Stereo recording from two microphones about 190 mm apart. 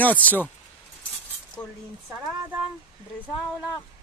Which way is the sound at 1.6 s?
5° left (ahead or behind).